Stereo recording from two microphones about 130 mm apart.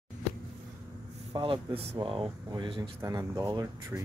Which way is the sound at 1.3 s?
40° right (ahead or behind).